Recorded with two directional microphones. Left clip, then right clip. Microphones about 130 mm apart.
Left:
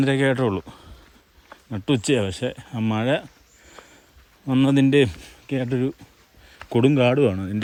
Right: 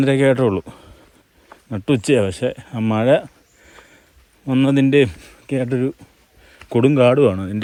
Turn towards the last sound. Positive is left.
turn(degrees=0)  # may be behind; listen again after turning